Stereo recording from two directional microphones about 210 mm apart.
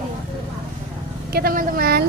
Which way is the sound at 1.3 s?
45° right (ahead or behind).